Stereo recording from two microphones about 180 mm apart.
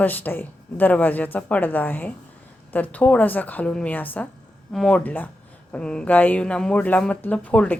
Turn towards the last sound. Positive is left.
turn(degrees=5)  # may be behind; listen again after turning